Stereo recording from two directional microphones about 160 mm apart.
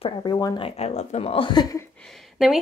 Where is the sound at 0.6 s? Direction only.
40° left (ahead or behind); by 1.8 s 25° left (ahead or behind).